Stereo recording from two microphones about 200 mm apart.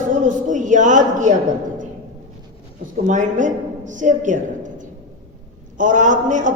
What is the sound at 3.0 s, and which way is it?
A man's voice, 40° right (ahead or behind).